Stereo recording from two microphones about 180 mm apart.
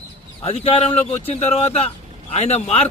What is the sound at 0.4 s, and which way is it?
A man's voice, 35° left (ahead or behind).